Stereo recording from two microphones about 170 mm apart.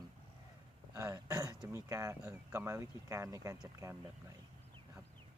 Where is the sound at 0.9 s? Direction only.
20° right (ahead or behind).